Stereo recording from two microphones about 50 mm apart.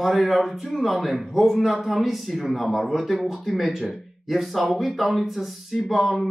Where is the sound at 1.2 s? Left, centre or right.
Centre.